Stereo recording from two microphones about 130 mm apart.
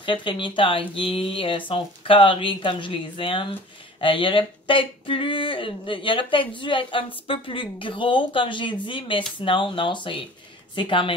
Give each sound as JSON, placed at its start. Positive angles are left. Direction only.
{"t": 0.0, "sound": "speech", "side_deg": 40}